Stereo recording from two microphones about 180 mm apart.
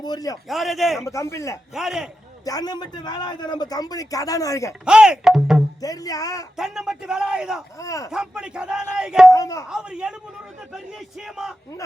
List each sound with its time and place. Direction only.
0.0 s a man's voice: 20° left (ahead or behind)
0.4 s speech: centre (ahead or behind)
1.0 s speech: 15° left (ahead or behind)
1.7 s speech: 5° right (ahead or behind)
2.4 s a man's voice: 20° left (ahead or behind)
4.9 s speech: 5° right (ahead or behind)
5.8 s a man's voice: 20° left (ahead or behind)
6.6 s speech: 5° right (ahead or behind)
7.8 s speech: 20° left (ahead or behind)
8.1 s speech: 5° right (ahead or behind)
9.3 s a man's voice: 20° left (ahead or behind)
9.6 s speech: 5° right (ahead or behind)